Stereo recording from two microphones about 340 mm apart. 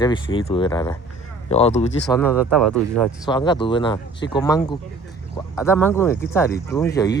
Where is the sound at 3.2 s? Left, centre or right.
Centre.